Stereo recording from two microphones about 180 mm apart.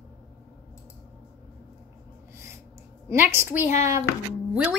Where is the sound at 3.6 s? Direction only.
45° left (ahead or behind).